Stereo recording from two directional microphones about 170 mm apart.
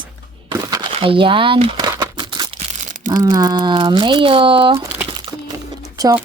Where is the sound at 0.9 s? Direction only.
30° right (ahead or behind).